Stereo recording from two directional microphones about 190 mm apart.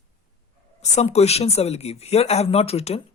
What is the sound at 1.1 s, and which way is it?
Speech, 35° left (ahead or behind).